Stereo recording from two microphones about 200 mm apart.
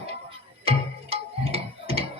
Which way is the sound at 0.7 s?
30° right (ahead or behind).